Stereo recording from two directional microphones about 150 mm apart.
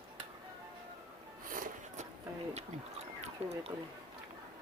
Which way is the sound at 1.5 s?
65° right (ahead or behind).